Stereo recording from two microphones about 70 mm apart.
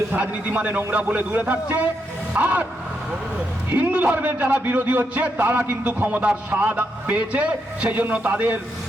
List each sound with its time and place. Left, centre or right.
0.1 s a man's voice: centre
3.7 s a man's voice: right